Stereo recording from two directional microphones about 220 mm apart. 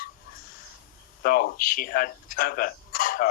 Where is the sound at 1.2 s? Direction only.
40° left (ahead or behind).